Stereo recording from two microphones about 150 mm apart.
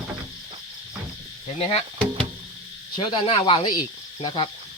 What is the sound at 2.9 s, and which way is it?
Speech, 30° left (ahead or behind).